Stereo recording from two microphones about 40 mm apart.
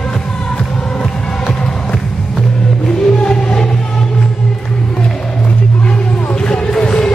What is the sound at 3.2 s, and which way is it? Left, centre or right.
Music, centre.